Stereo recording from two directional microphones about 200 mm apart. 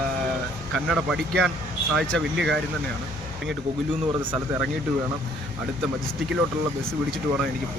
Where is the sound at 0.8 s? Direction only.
5° right (ahead or behind).